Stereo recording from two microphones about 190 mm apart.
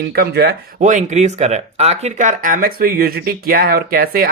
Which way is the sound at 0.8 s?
40° right (ahead or behind).